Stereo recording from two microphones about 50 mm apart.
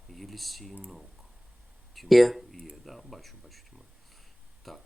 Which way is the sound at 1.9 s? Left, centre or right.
Centre.